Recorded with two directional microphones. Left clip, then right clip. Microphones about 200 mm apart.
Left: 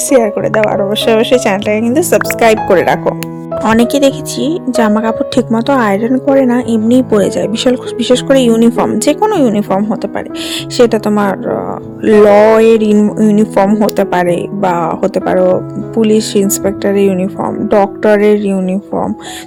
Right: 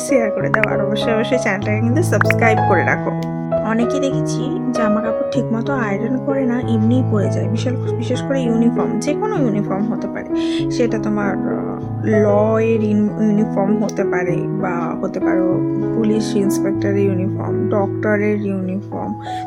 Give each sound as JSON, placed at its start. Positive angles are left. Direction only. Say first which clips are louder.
{"t": 0.1, "sound": "speech", "louder": "left 6 dB", "side_deg": 35}
{"t": 3.6, "sound": "speech", "louder": "left 11 dB", "side_deg": 45}
{"t": 10.8, "sound": "speech", "louder": "left 9 dB", "side_deg": 45}